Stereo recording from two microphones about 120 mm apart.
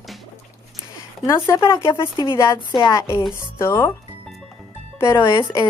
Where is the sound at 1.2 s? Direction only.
30° left (ahead or behind).